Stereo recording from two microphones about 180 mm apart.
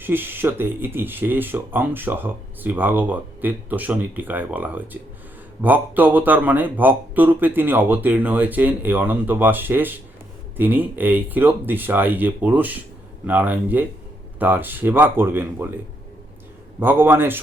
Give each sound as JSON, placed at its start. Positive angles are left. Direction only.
{"t": 0.0, "sound": "speech", "side_deg": -10}
{"t": 16.8, "sound": "speech", "side_deg": -10}